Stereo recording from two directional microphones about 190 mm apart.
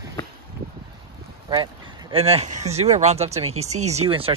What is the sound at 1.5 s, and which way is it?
Speech, 25° right (ahead or behind).